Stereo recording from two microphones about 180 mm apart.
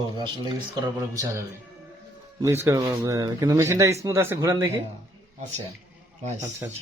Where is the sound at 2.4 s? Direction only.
15° right (ahead or behind).